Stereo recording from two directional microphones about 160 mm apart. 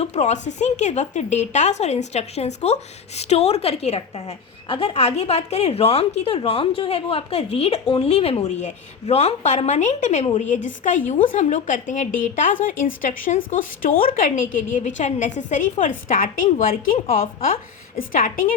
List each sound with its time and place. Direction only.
0.0 s a woman's voice: 45° left (ahead or behind); by 16.6 s 60° left (ahead or behind)
17.9 s speech: 55° left (ahead or behind)